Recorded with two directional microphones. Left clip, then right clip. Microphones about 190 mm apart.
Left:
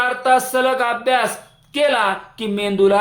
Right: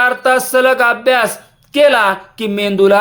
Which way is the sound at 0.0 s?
35° right (ahead or behind).